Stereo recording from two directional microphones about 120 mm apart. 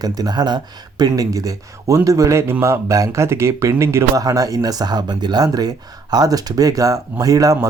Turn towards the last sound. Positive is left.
turn(degrees=-30)  # may be behind; listen again after turning